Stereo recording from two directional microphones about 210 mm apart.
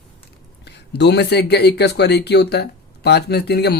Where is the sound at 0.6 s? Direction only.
50° left (ahead or behind).